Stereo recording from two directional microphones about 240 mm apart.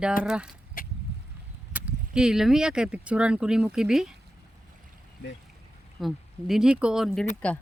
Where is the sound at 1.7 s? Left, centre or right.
Centre.